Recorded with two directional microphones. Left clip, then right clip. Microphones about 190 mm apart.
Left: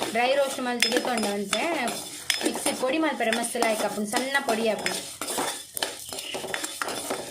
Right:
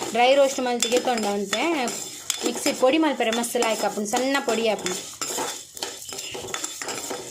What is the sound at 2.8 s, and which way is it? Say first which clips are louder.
Speech: right 6 dB; 40° right (ahead or behind).